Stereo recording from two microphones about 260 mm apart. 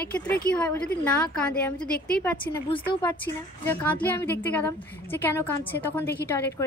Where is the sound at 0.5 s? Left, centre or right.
Centre.